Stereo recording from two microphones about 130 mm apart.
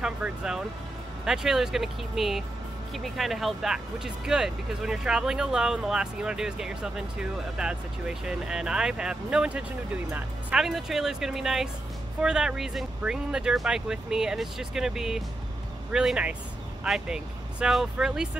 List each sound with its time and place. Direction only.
0.0 s speech: 5° right (ahead or behind)